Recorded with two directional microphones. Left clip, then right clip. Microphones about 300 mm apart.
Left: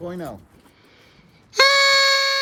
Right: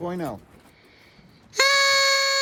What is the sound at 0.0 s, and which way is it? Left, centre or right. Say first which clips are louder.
Speech: right 2 dB; right.